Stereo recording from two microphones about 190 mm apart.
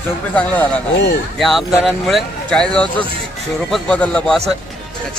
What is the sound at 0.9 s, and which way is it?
Speech, 65° left (ahead or behind).